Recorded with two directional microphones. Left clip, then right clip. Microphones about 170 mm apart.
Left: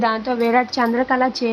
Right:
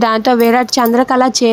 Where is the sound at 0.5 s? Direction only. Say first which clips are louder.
Right 6 dB; 25° right (ahead or behind).